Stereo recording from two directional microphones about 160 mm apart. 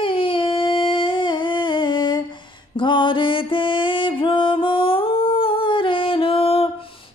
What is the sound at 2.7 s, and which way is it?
Music, 30° left (ahead or behind).